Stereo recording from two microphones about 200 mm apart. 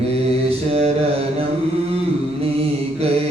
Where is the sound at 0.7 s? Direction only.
30° right (ahead or behind).